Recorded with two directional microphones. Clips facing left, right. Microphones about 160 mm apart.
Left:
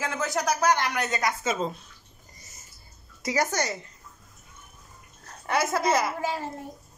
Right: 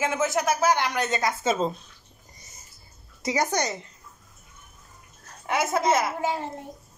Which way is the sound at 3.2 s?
20° right (ahead or behind).